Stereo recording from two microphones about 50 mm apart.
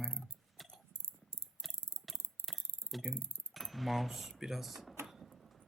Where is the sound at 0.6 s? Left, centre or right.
Centre.